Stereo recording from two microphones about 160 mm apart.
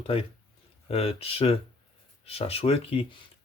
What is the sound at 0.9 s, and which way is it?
Speech, 40° left (ahead or behind).